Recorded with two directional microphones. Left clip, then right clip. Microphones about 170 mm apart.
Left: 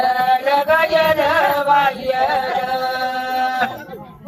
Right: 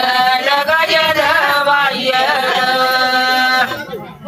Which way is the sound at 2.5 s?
50° left (ahead or behind).